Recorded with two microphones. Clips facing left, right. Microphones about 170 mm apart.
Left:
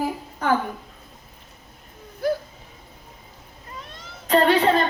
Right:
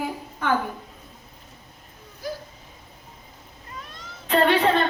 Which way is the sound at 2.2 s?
60° left (ahead or behind).